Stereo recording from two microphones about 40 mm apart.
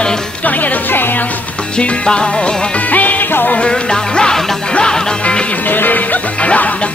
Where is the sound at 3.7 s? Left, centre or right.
Centre.